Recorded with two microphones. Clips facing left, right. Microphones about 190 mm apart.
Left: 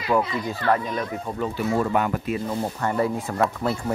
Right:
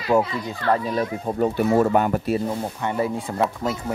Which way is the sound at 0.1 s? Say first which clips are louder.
Right 3 dB; 25° right (ahead or behind).